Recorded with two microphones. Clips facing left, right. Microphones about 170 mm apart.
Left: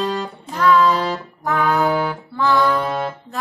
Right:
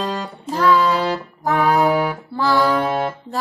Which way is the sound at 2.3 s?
35° right (ahead or behind).